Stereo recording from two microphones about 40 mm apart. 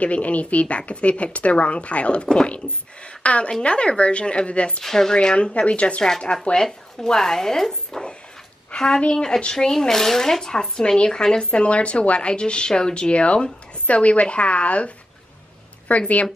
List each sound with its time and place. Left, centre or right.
0.0 s speech: left
3.2 s a sound: left
3.6 s speech: left
4.8 s speech: centre; by 6.0 s left
6.0 s a woman's voice: centre; by 14.9 s left
15.9 s speech: left